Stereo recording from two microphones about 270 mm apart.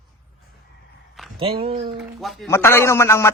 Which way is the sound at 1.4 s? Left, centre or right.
Right.